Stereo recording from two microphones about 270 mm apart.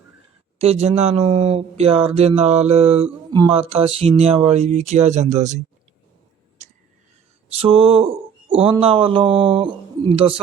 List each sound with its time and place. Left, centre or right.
0.6 s speech: right
7.5 s speech: right